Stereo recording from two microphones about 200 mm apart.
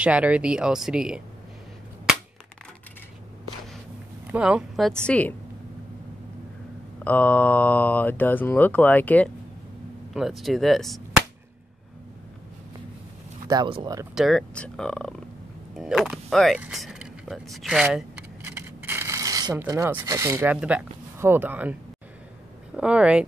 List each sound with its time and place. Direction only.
0.0 s speech: 5° right (ahead or behind)
4.3 s speech: 5° right (ahead or behind)
7.1 s speech: 5° left (ahead or behind)
10.1 s whip: centre (ahead or behind)
13.5 s speech: 25° right (ahead or behind)
14.1 s speech: centre (ahead or behind)
22.8 s speech: 5° right (ahead or behind)